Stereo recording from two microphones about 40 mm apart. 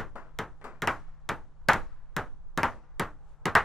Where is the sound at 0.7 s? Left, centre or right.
Centre.